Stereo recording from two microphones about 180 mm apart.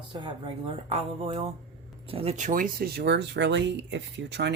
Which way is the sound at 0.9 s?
35° right (ahead or behind).